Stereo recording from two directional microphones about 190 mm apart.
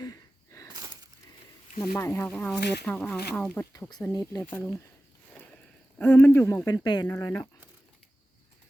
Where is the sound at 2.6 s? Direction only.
60° left (ahead or behind).